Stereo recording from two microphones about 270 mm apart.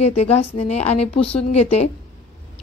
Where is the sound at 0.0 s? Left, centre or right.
Left.